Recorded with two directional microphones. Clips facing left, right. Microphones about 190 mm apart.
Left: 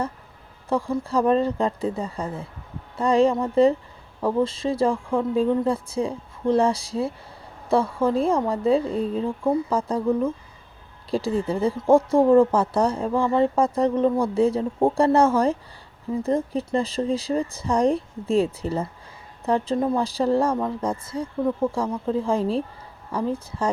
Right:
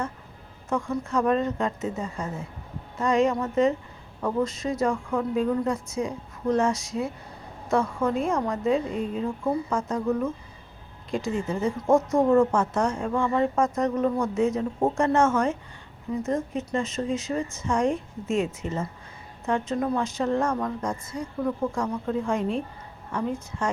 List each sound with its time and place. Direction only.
0.7 s speech: 35° left (ahead or behind)